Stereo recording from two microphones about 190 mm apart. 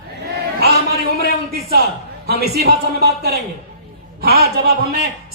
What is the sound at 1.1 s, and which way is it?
A man's voice, 55° right (ahead or behind).